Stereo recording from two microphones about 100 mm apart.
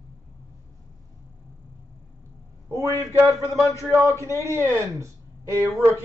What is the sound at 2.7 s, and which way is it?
A man's voice, 30° right (ahead or behind).